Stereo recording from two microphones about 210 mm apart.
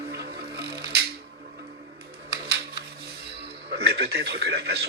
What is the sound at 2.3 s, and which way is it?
Music, 50° right (ahead or behind).